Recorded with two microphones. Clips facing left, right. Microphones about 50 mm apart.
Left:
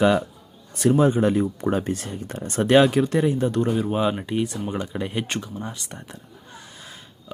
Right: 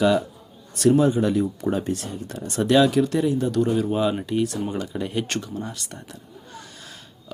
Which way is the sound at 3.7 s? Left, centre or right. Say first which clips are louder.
Right 1 dB; centre.